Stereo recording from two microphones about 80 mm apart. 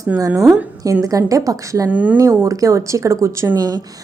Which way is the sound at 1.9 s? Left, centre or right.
Centre.